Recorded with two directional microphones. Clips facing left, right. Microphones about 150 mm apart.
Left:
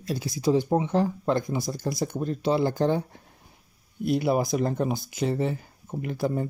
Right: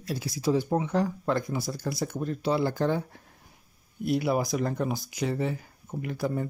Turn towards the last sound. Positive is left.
turn(degrees=25)  # may be behind; listen again after turning